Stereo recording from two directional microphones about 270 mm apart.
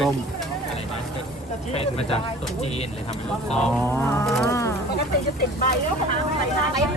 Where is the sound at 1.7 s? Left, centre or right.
Left.